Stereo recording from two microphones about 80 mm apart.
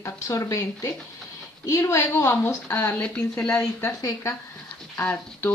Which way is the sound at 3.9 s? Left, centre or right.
Left.